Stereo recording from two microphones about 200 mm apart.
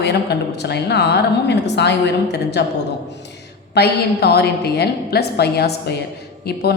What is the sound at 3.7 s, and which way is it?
A woman's voice, 55° left (ahead or behind).